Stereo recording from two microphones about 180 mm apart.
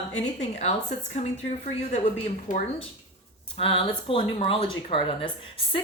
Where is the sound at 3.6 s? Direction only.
30° left (ahead or behind).